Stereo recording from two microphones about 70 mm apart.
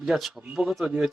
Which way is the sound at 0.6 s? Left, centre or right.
Centre.